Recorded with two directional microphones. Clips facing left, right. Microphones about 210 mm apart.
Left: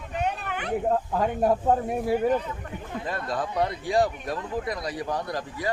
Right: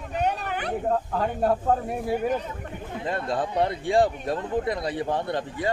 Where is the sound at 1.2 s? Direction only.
15° left (ahead or behind).